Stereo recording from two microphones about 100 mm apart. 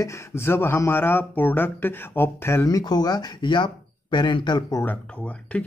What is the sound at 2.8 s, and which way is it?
Speech, 45° left (ahead or behind).